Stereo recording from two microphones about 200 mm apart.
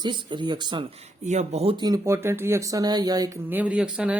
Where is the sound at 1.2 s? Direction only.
35° right (ahead or behind).